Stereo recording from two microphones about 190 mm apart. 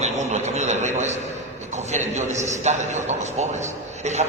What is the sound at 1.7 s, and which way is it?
A man's voice, 35° right (ahead or behind).